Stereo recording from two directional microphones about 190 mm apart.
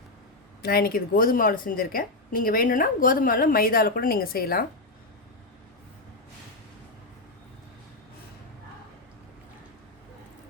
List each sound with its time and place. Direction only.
0.6 s a woman's voice: 50° left (ahead or behind)